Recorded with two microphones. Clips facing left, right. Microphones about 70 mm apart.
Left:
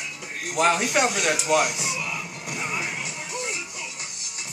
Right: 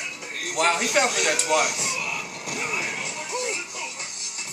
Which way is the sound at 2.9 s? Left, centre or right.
Right.